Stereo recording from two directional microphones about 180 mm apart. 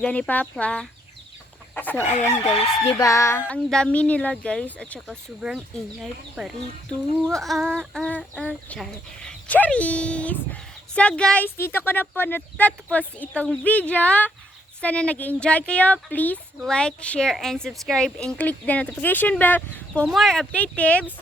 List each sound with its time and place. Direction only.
0.0 s speech: 5° left (ahead or behind)
1.7 s chicken: 10° left (ahead or behind)
2.4 s chicken: 35° left (ahead or behind)
3.0 s speech: 15° left (ahead or behind)
3.7 s a woman's voice: 5° left (ahead or behind)